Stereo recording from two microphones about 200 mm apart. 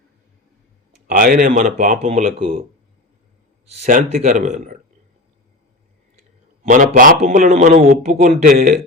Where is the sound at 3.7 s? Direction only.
35° right (ahead or behind).